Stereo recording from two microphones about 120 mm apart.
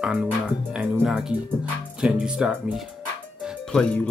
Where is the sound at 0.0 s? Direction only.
5° right (ahead or behind).